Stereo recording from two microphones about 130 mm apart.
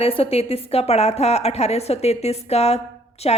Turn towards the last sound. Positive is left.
turn(degrees=50)  # may be behind; listen again after turning